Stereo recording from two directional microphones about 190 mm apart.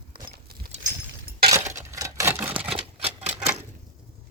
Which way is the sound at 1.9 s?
15° right (ahead or behind).